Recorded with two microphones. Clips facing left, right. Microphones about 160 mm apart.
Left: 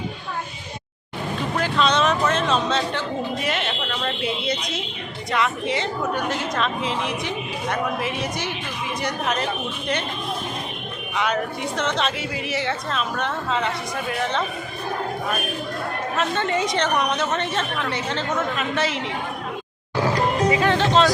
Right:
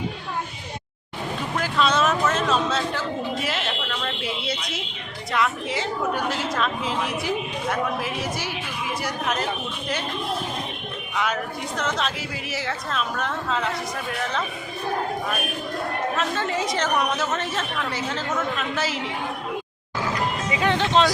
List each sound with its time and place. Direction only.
1.5 s a sound: 5° right (ahead or behind)
5.3 s a woman's voice: centre (ahead or behind)
11.8 s a woman's voice: centre (ahead or behind)
16.1 s a woman's voice: centre (ahead or behind)
20.0 s music: 35° left (ahead or behind)
20.6 s speech: 15° right (ahead or behind)